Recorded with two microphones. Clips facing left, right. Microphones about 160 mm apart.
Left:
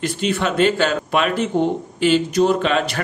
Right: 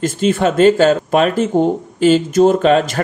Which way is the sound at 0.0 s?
45° right (ahead or behind).